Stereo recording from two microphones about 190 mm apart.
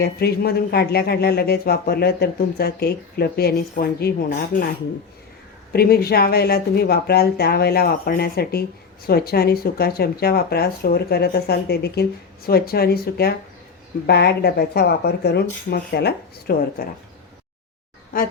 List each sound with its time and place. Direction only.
0.0 s speech: 55° left (ahead or behind)
4.5 s speech: 45° left (ahead or behind)
5.7 s speech: 55° left (ahead or behind)